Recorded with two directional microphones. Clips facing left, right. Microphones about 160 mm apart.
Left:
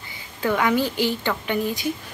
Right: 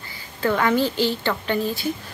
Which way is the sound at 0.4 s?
5° left (ahead or behind).